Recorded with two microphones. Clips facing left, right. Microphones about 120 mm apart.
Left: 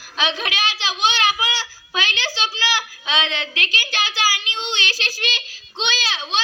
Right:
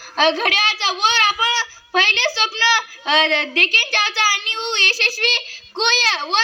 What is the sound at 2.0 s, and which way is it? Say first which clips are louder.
A woman's voice: right 5 dB; 65° right (ahead or behind).